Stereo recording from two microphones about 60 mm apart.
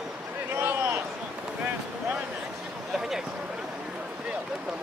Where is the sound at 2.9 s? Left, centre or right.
Centre.